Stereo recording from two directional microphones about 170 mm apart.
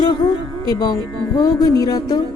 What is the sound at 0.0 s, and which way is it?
A woman's voice, 25° left (ahead or behind).